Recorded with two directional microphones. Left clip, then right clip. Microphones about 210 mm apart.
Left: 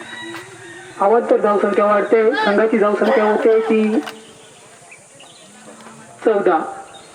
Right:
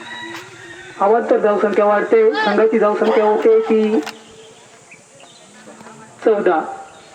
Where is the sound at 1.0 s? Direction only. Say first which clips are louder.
Even; 30° right (ahead or behind).